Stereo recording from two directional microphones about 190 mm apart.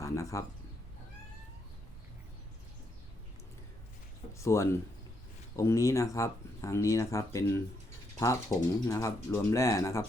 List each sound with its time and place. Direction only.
0.0 s speech: 15° left (ahead or behind)
4.4 s speech: 15° left (ahead or behind)